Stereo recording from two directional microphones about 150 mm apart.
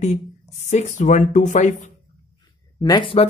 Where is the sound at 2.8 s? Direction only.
30° left (ahead or behind).